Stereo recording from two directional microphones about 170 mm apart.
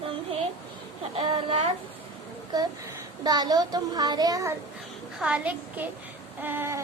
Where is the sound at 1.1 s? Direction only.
35° right (ahead or behind).